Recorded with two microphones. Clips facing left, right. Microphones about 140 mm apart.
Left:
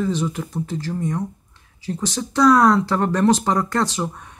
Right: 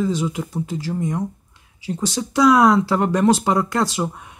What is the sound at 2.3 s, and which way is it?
Speech, 10° right (ahead or behind).